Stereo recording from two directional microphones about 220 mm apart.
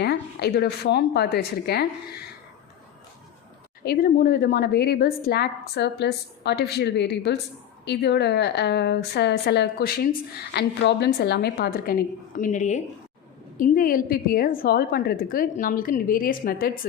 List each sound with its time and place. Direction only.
0.0 s a woman's voice: 50° left (ahead or behind)
3.8 s a woman's voice: 40° left (ahead or behind)